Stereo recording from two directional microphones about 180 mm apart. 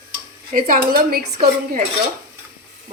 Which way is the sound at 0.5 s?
55° right (ahead or behind).